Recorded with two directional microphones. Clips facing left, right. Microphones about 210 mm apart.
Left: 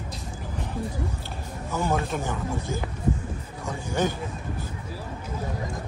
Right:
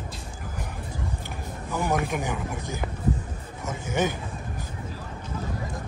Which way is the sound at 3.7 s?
20° right (ahead or behind).